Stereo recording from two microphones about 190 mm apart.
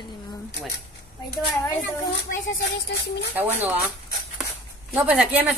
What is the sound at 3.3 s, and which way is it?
A woman's voice, 10° right (ahead or behind).